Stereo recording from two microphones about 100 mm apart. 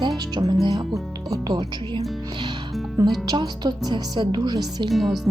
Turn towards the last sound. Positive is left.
turn(degrees=0)  # may be behind; listen again after turning